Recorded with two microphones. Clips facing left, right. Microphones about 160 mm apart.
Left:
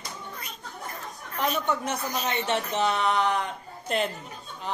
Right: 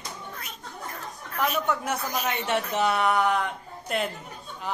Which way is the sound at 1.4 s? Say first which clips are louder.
Right 1 dB; 30° left (ahead or behind).